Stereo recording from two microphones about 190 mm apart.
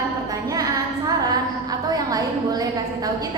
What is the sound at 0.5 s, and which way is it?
Female singing, 20° right (ahead or behind).